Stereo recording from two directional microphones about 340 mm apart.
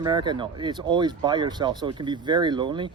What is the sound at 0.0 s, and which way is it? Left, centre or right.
Speech, centre.